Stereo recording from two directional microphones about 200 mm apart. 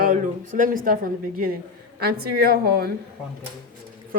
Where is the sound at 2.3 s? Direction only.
50° right (ahead or behind).